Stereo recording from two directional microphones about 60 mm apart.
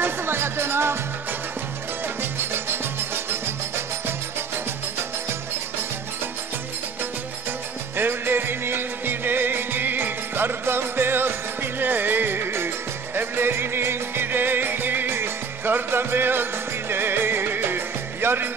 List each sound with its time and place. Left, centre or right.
0.0 s music: right
2.5 s music: right
7.9 s music: right